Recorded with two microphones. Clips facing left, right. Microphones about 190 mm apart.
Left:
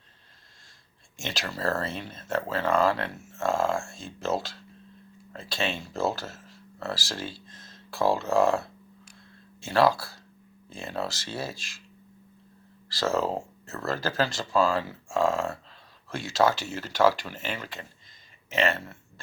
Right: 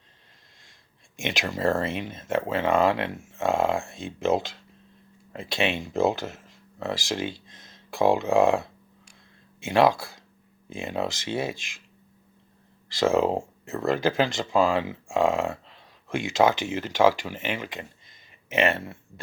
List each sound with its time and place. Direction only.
1.1 s speech: 20° right (ahead or behind)
13.0 s speech: 15° right (ahead or behind)